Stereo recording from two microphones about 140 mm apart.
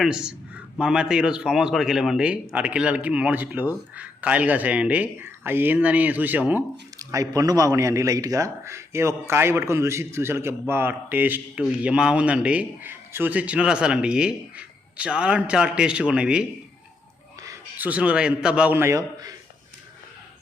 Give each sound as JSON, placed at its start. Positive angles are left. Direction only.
{"t": 0.0, "sound": "a man's voice", "side_deg": -5}
{"t": 7.1, "sound": "a man's voice", "side_deg": -25}
{"t": 17.4, "sound": "a sound", "side_deg": -20}
{"t": 17.8, "sound": "a man's voice", "side_deg": -10}